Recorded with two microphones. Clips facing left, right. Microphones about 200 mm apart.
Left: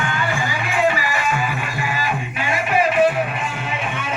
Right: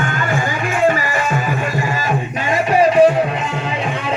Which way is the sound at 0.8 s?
45° right (ahead or behind).